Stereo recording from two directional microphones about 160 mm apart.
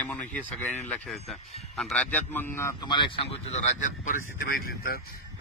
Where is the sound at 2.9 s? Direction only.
35° left (ahead or behind); by 4.9 s 70° left (ahead or behind).